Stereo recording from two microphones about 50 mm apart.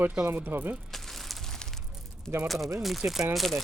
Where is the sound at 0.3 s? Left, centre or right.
Right.